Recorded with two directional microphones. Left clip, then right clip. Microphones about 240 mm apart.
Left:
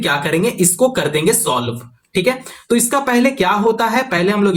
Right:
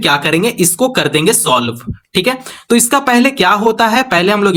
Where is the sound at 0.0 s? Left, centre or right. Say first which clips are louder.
Right 4 dB; right.